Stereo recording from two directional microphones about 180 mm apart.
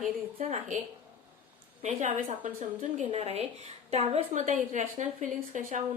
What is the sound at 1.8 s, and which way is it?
A woman's voice, 40° right (ahead or behind).